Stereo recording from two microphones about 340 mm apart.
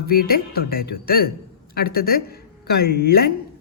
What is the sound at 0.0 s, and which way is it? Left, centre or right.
Speech, left.